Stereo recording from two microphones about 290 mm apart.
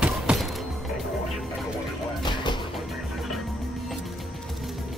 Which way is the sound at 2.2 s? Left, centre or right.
Centre.